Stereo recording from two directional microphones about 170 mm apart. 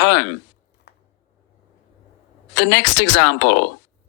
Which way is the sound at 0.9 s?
90° left.